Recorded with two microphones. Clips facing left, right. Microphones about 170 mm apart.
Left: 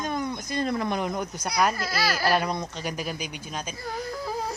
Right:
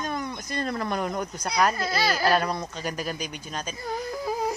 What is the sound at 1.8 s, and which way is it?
Speech, 25° right (ahead or behind).